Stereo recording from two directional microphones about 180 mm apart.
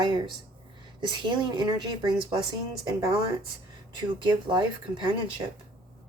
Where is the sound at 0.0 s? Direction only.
25° right (ahead or behind).